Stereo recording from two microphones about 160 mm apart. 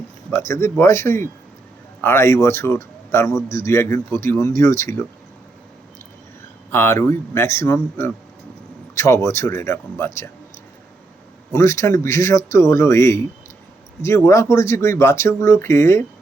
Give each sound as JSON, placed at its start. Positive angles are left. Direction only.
{"t": 0.3, "sound": "a man's voice", "side_deg": 15}
{"t": 6.7, "sound": "a man's voice", "side_deg": 15}
{"t": 11.5, "sound": "a man's voice", "side_deg": 20}